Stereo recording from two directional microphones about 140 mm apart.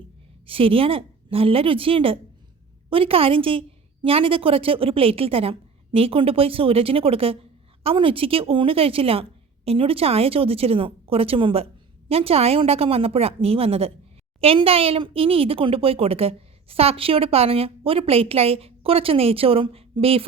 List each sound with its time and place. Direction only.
0.4 s a woman's voice: 40° right (ahead or behind)